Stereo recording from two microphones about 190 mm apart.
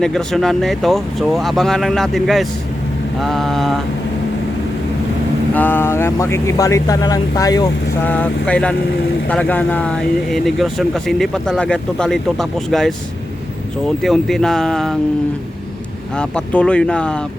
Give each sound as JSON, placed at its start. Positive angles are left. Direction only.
{"t": 0.0, "sound": "speech", "side_deg": 5}
{"t": 5.5, "sound": "speech", "side_deg": 10}
{"t": 8.0, "sound": "speech", "side_deg": 5}
{"t": 16.1, "sound": "speech", "side_deg": 5}